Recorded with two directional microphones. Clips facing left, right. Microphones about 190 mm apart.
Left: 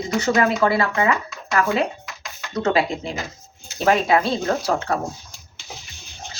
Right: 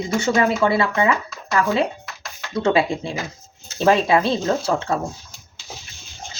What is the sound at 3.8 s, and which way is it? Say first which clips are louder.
Speech: right 1 dB; 25° right (ahead or behind).